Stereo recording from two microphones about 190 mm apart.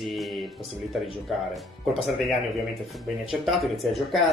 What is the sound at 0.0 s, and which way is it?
Music, centre (ahead or behind).